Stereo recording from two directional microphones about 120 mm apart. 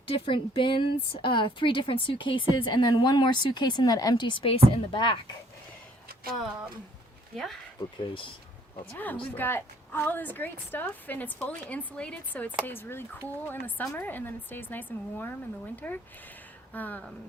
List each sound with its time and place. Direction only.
0.1 s speech: 45° left (ahead or behind)
6.3 s speech: centre (ahead or behind)
8.9 s a woman's voice: 15° left (ahead or behind)